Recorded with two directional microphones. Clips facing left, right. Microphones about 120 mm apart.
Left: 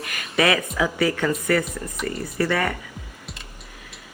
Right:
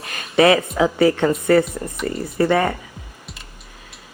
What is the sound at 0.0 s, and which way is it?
Speech, 30° right (ahead or behind).